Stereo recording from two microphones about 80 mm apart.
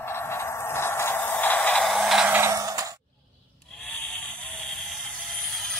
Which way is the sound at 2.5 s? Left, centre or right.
Right.